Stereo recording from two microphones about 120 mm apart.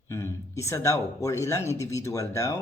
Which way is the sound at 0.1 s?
25° left (ahead or behind).